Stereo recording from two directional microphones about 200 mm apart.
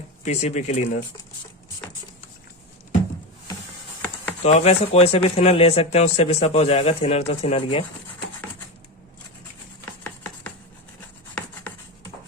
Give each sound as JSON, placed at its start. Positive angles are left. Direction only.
{"t": 0.3, "sound": "speech", "side_deg": 35}
{"t": 4.4, "sound": "speech", "side_deg": 30}
{"t": 10.0, "sound": "a sound", "side_deg": 10}